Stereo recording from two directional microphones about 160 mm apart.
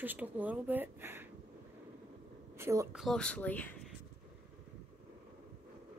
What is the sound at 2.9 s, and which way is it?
Speech, centre (ahead or behind).